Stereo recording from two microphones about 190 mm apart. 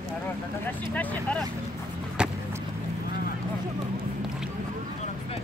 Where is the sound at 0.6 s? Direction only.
10° left (ahead or behind).